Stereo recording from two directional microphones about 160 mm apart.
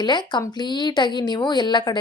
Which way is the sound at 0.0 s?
25° left (ahead or behind).